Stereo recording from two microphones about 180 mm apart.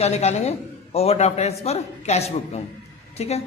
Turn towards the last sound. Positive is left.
turn(degrees=35)  # may be behind; listen again after turning